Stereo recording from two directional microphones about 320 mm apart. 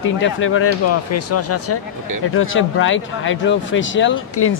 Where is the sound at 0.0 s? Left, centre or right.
Left.